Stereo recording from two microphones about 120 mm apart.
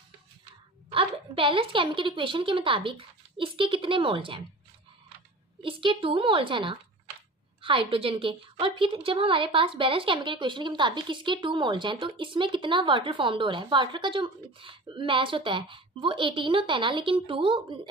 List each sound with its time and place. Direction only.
0.8 s a woman's voice: 50° right (ahead or behind)
5.6 s a woman's voice: 45° right (ahead or behind)